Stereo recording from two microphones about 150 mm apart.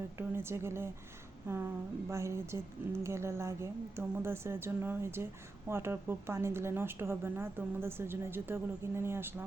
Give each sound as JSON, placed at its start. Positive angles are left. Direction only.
{"t": 0.2, "sound": "a woman's voice", "side_deg": -15}